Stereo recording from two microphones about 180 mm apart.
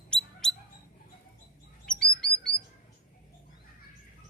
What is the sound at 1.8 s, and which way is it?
Chirp, 5° left (ahead or behind).